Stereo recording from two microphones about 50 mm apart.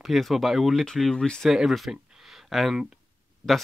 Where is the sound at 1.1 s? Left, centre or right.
Centre.